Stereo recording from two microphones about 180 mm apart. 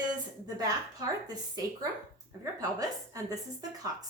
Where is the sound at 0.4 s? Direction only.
20° right (ahead or behind).